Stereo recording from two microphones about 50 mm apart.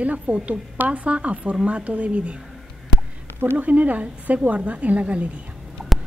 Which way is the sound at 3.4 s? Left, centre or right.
Right.